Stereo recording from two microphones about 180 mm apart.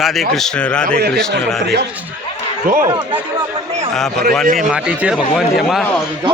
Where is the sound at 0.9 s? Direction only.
60° right (ahead or behind).